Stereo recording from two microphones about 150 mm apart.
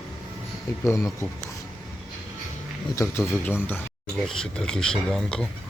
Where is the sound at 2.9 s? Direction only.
15° left (ahead or behind).